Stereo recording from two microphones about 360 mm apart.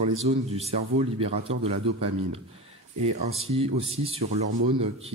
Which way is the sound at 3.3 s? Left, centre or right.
Centre.